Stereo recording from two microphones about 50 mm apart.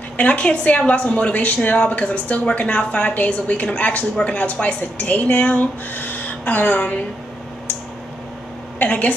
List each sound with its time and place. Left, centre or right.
0.2 s a woman's voice: left
8.7 s a woman's voice: left